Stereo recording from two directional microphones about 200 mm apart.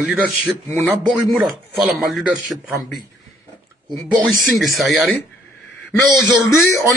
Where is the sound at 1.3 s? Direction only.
5° right (ahead or behind).